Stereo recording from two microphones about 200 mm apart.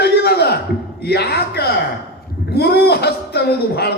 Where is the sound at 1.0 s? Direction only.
55° left (ahead or behind).